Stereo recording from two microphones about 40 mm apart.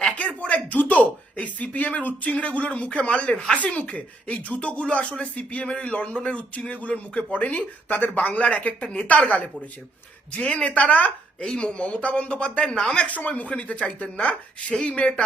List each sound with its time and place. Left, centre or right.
0.2 s a sound: left
1.5 s speech: left
6.7 s speech: left
7.9 s speech: left
8.3 s speech: left